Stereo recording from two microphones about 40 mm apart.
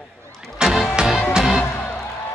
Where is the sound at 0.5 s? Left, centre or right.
Centre.